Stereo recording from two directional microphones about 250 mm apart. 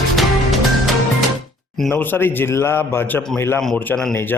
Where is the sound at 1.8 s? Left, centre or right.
Centre.